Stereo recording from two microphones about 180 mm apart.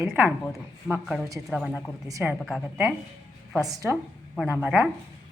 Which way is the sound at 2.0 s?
20° right (ahead or behind).